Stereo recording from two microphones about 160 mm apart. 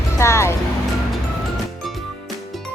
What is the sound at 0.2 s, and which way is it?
Music, 15° left (ahead or behind).